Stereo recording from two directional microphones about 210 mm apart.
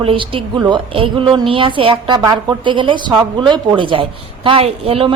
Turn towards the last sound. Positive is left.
turn(degrees=-25)  # may be behind; listen again after turning